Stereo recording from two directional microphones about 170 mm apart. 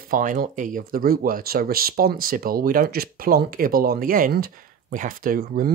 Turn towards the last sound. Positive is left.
turn(degrees=-55)  # may be behind; listen again after turning